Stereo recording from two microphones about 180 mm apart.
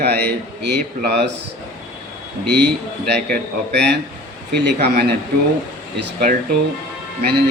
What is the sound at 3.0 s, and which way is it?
Speech, 70° right (ahead or behind).